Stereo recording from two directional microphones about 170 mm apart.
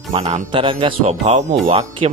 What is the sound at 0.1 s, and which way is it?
Speech, 40° right (ahead or behind).